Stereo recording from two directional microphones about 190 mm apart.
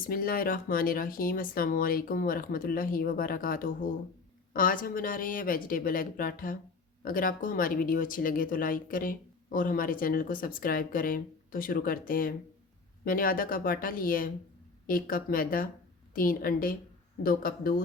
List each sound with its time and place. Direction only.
0.1 s speech: 50° left (ahead or behind)